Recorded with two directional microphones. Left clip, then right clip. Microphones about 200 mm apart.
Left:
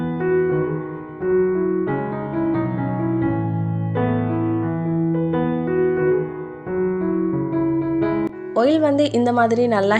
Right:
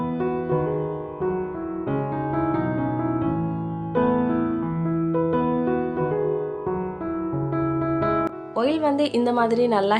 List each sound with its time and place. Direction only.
0.2 s music: centre (ahead or behind)
5.3 s music: centre (ahead or behind)
8.0 s music: centre (ahead or behind)
8.5 s speech: 20° left (ahead or behind)